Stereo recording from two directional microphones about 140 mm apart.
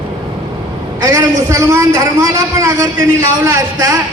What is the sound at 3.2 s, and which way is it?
Speech, 20° right (ahead or behind).